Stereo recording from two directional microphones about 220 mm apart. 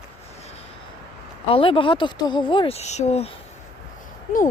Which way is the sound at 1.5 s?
25° left (ahead or behind).